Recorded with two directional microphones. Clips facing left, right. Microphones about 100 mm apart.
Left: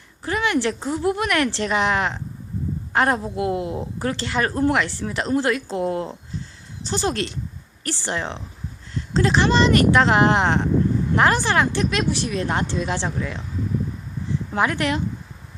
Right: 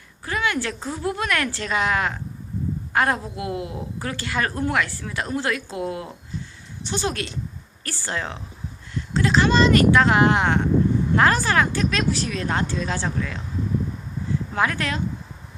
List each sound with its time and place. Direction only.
0.3 s a woman's voice: 30° left (ahead or behind)
14.5 s a woman's voice: 25° left (ahead or behind)